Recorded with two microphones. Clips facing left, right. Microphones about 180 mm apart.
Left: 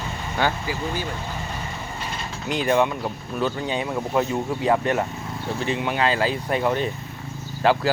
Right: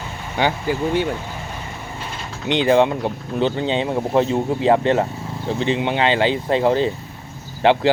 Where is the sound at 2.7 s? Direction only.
25° right (ahead or behind).